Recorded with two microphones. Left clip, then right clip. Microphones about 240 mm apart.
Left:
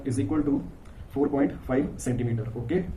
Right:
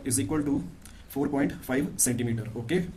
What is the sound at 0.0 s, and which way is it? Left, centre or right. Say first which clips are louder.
Speech: left 2 dB; right.